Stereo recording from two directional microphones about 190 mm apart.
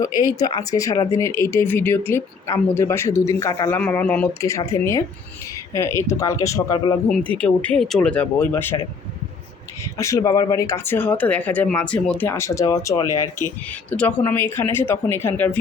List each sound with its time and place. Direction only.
0.3 s speech: 20° left (ahead or behind)
7.3 s speech: 5° left (ahead or behind)
9.8 s speech: 15° left (ahead or behind)